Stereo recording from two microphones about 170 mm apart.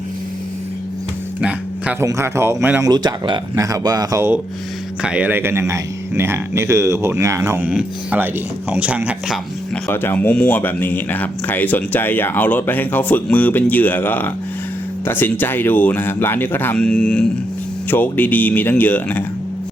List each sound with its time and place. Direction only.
1.4 s music: 5° right (ahead or behind)
2.0 s speech: 15° right (ahead or behind)
2.8 s speech: 25° right (ahead or behind); by 9.4 s 5° right (ahead or behind)
9.9 s speech: 10° left (ahead or behind)